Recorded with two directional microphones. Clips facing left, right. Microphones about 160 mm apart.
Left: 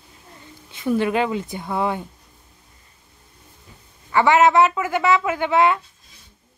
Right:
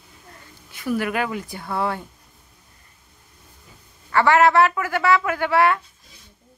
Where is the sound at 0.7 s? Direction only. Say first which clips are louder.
Left 4 dB; 25° left (ahead or behind).